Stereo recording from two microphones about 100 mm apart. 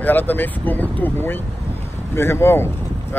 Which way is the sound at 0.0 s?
20° left (ahead or behind).